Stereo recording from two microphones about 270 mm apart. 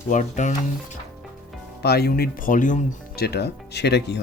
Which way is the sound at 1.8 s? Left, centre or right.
Left.